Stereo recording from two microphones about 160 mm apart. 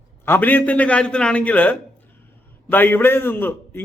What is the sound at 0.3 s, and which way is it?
A man's voice, 10° left (ahead or behind).